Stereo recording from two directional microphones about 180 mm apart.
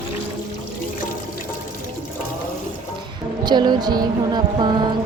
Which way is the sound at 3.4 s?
25° right (ahead or behind).